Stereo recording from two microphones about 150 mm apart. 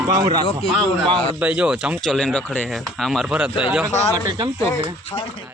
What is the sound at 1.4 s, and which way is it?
Speech, 5° right (ahead or behind).